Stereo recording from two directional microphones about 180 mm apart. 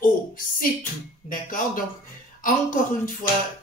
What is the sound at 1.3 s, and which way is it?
Speech, 50° left (ahead or behind).